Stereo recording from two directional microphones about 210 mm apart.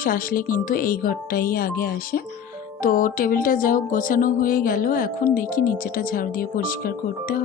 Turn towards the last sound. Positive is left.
turn(degrees=45)  # may be behind; listen again after turning